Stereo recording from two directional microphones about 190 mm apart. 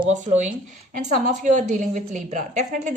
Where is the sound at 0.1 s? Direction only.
40° right (ahead or behind).